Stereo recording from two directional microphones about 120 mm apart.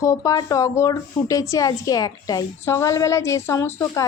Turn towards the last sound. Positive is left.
turn(degrees=30)  # may be behind; listen again after turning